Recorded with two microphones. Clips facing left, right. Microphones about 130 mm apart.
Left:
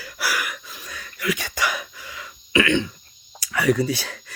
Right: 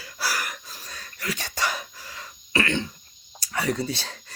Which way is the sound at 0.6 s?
35° right (ahead or behind).